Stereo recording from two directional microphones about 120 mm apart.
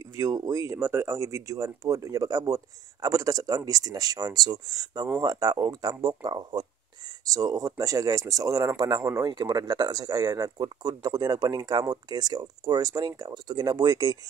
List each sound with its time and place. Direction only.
0.0 s speech: 30° right (ahead or behind)